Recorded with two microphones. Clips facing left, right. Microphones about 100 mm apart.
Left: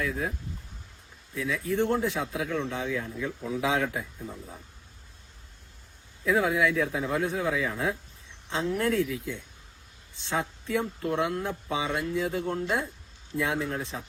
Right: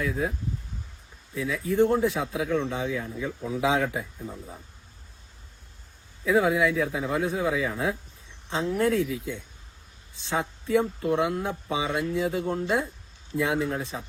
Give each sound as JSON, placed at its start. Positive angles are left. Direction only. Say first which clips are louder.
{"t": 0.0, "sound": "speech", "louder": "right 3 dB", "side_deg": 0}
{"t": 1.4, "sound": "speech", "louder": "right 4 dB", "side_deg": -5}
{"t": 6.2, "sound": "speech", "louder": "right 2 dB", "side_deg": -5}